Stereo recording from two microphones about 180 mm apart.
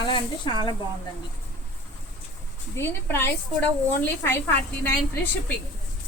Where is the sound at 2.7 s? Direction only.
15° left (ahead or behind).